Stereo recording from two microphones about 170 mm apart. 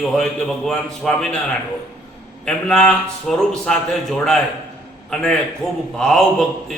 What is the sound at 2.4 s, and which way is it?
A man's voice, 5° left (ahead or behind).